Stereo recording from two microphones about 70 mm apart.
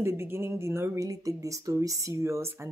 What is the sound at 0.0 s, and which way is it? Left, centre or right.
Speech, right.